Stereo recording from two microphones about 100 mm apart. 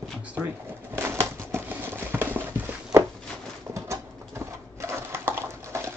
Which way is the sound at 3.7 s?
30° right (ahead or behind).